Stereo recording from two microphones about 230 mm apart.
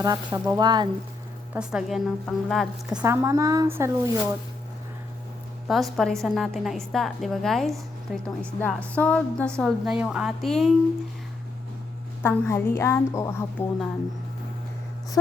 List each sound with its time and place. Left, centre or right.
0.0 s a woman's voice: centre
1.5 s a woman's voice: centre
5.6 s a woman's voice: centre
12.2 s a woman's voice: centre